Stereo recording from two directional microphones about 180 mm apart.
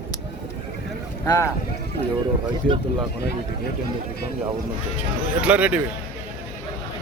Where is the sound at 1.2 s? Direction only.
15° left (ahead or behind).